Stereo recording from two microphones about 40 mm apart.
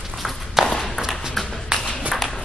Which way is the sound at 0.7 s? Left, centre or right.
Centre.